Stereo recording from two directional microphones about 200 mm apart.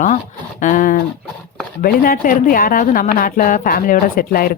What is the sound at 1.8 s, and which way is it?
A woman's voice, 45° left (ahead or behind).